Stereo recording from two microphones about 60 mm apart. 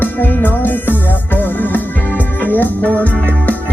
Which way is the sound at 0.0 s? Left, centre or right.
Left.